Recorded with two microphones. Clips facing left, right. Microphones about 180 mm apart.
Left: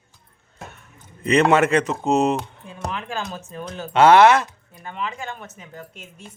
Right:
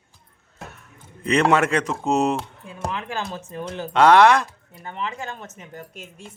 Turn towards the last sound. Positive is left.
turn(degrees=-20)  # may be behind; listen again after turning